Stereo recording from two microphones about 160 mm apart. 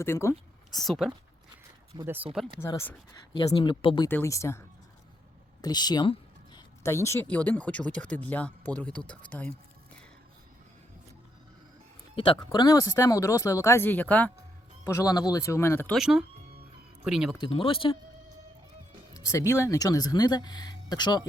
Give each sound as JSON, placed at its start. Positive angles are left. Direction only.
{"t": 0.0, "sound": "speech", "side_deg": 15}
{"t": 0.7, "sound": "speech", "side_deg": 0}
{"t": 2.0, "sound": "speech", "side_deg": -10}
{"t": 2.6, "sound": "speech", "side_deg": 15}
{"t": 3.3, "sound": "speech", "side_deg": 30}
{"t": 4.1, "sound": "speech", "side_deg": 15}
{"t": 5.6, "sound": "a sound", "side_deg": 25}
{"t": 6.8, "sound": "speech", "side_deg": 15}
{"t": 12.1, "sound": "speech", "side_deg": 30}
{"t": 14.8, "sound": "speech", "side_deg": 20}
{"t": 15.9, "sound": "speech", "side_deg": -5}
{"t": 17.4, "sound": "speech", "side_deg": 35}
{"t": 19.1, "sound": "speech", "side_deg": 20}